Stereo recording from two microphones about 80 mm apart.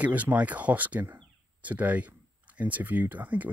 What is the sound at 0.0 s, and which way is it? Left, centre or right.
Speech, centre.